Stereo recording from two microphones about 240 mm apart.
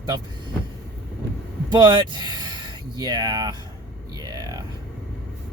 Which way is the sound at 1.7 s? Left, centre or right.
Centre.